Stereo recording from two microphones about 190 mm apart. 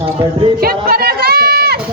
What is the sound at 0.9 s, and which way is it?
Run, 55° right (ahead or behind).